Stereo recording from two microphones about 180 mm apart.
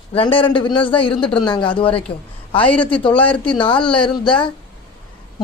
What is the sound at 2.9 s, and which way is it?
Speech, 30° left (ahead or behind).